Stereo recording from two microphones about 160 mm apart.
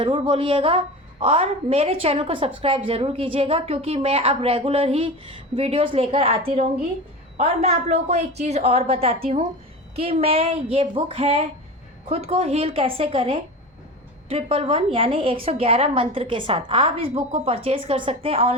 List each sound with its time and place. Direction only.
0.0 s a woman's voice: 35° right (ahead or behind)